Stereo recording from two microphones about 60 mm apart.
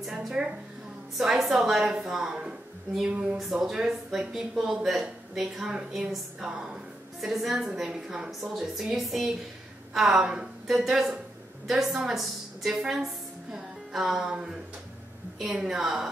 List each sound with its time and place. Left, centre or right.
0.4 s a woman's voice: centre
3.1 s a woman's voice: centre
3.5 s a woman's voice: centre